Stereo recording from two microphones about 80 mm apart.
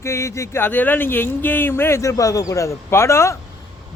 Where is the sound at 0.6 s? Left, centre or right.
Left.